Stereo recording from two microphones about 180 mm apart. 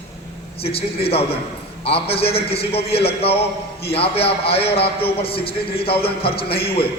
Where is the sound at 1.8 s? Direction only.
35° left (ahead or behind).